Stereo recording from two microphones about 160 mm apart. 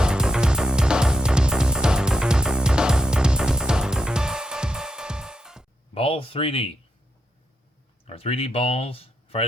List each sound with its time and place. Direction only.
0.0 s music: 5° right (ahead or behind)
5.9 s a sound: 35° left (ahead or behind)
8.0 s speech: 40° left (ahead or behind)